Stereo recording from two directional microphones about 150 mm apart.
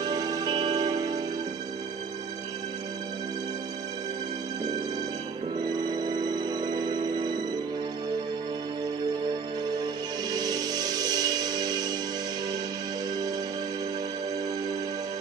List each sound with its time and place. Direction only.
0.0 s music: 25° right (ahead or behind)
5.9 s music: 25° right (ahead or behind)
10.3 s music: 25° right (ahead or behind)